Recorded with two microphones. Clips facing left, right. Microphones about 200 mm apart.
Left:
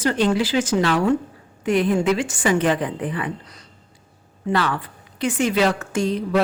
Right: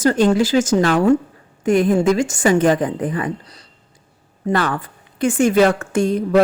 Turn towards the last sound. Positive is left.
turn(degrees=-50)  # may be behind; listen again after turning